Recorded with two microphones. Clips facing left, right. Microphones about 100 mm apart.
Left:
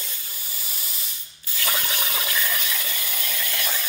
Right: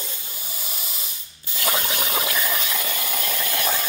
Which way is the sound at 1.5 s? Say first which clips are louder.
Right 3 dB; 30° right (ahead or behind).